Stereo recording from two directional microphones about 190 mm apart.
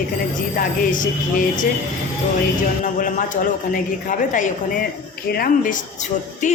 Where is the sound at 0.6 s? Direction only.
45° left (ahead or behind).